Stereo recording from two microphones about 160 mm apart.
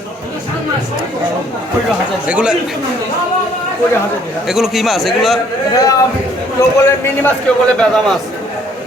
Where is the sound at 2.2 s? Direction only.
5° right (ahead or behind).